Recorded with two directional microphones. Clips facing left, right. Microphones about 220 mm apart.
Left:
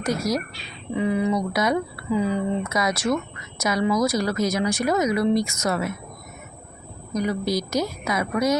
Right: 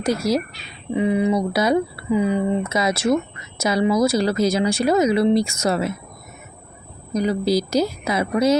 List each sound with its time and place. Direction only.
0.0 s a woman's voice: 30° right (ahead or behind)
2.0 s a woman's voice: 20° right (ahead or behind)
7.1 s a woman's voice: 30° right (ahead or behind)